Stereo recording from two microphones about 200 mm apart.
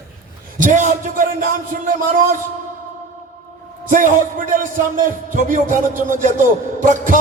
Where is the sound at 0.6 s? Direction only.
40° right (ahead or behind).